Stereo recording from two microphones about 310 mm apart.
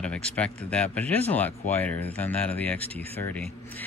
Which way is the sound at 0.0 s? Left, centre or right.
Centre.